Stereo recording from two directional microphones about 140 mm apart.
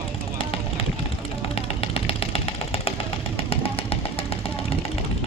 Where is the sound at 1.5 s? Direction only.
40° left (ahead or behind).